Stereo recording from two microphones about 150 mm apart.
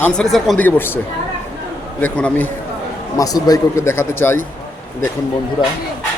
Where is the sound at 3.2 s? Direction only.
25° left (ahead or behind).